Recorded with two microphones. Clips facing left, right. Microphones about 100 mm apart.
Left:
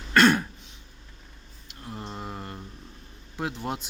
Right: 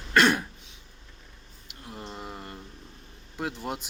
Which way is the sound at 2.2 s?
20° left (ahead or behind).